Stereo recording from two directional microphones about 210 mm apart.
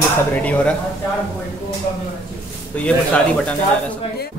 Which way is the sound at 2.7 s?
5° left (ahead or behind).